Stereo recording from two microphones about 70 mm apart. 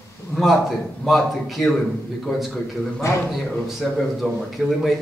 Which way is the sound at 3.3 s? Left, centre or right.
Centre.